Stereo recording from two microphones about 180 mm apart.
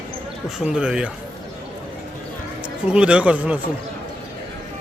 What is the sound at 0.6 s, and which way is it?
Speech, 5° right (ahead or behind).